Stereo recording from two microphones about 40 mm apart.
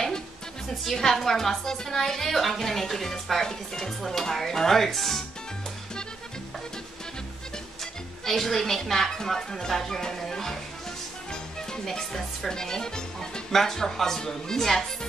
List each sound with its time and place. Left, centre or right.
0.9 s a woman's voice: centre
7.8 s speech: centre
11.7 s a woman's voice: centre